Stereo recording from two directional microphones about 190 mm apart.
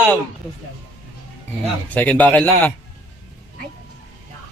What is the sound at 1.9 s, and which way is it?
Speech, 10° left (ahead or behind).